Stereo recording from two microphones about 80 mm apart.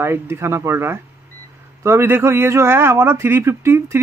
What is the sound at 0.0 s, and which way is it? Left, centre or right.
A man's voice, right.